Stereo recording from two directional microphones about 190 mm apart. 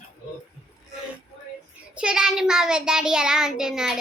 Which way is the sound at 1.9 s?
5° right (ahead or behind).